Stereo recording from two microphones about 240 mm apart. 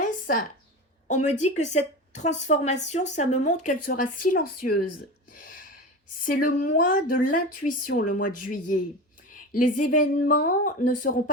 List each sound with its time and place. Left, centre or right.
1.0 s a woman's voice: left
5.4 s a sound: left
6.2 s speech: left